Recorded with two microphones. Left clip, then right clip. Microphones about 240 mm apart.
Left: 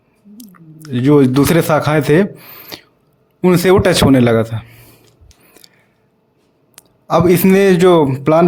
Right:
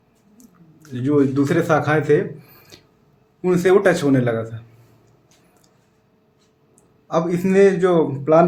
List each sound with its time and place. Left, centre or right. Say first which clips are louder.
0.8 s speech: left 7 dB; left
5.6 s a sound: left 12 dB; left
7.1 s speech: left 8 dB; left